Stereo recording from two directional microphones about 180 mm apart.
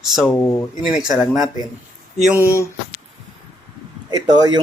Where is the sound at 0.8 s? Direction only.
5° right (ahead or behind).